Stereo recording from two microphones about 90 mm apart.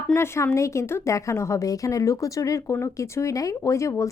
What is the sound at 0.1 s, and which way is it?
A woman's voice, 30° left (ahead or behind).